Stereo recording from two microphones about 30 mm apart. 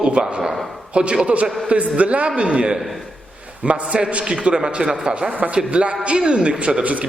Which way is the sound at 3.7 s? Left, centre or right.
Right.